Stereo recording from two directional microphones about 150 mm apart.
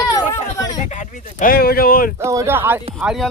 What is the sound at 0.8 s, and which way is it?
Speech, 55° left (ahead or behind).